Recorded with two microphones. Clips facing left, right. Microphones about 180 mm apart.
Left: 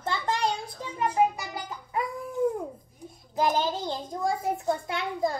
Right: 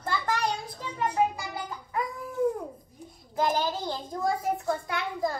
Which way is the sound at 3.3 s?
20° left (ahead or behind).